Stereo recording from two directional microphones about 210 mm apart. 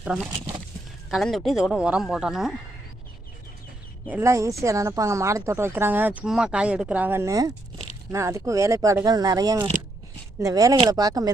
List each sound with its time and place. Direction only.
0.0 s speech: 5° right (ahead or behind)
4.1 s speech: 15° right (ahead or behind)